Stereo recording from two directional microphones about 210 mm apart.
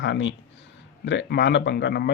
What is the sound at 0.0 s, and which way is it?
A man's voice, 60° left (ahead or behind).